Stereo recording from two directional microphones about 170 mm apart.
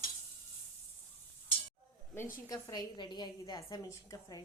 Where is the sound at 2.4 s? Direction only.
20° left (ahead or behind).